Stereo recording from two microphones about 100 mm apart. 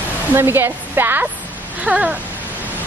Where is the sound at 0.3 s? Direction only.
20° right (ahead or behind).